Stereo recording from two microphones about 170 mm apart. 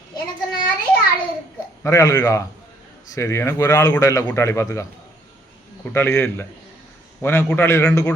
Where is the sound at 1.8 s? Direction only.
20° left (ahead or behind).